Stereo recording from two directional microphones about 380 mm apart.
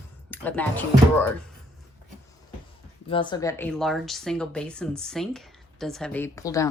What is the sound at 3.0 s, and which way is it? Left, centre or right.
Speech, centre.